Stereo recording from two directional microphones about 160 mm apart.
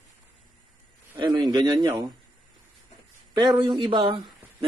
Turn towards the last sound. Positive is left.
turn(degrees=-30)  # may be behind; listen again after turning